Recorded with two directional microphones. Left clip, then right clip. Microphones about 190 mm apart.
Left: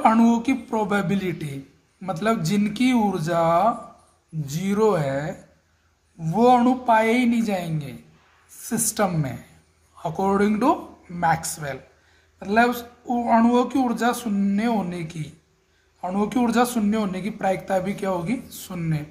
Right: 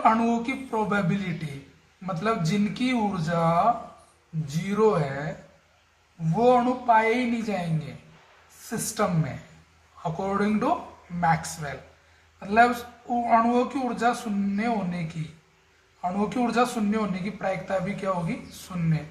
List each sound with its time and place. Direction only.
0.0 s speech: 50° left (ahead or behind)
6.3 s speech: 50° left (ahead or behind)
16.2 s speech: 45° left (ahead or behind)